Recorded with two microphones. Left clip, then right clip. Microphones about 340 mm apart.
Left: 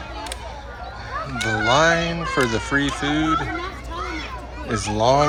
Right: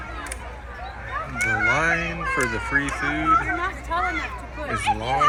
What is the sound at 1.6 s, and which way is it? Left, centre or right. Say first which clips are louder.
Music: left 6 dB; centre.